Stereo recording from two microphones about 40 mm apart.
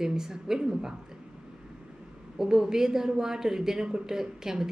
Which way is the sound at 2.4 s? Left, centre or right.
Centre.